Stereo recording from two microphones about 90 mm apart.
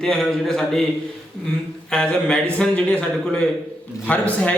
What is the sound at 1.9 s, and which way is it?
Bell, 10° left (ahead or behind).